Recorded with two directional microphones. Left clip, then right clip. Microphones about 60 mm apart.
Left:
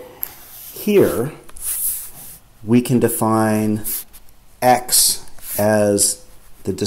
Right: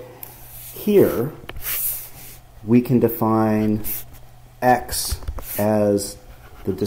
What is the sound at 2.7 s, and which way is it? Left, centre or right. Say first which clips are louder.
Speech: left 1 dB; centre.